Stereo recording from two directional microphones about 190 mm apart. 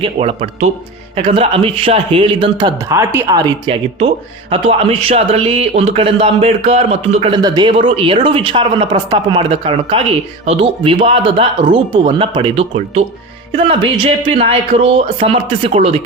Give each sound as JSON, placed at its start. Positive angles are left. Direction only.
{"t": 0.0, "sound": "a man's voice", "side_deg": -30}
{"t": 7.4, "sound": "speech", "side_deg": -20}